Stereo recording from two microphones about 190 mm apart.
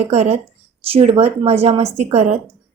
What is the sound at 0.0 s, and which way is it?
A woman's voice, 35° right (ahead or behind).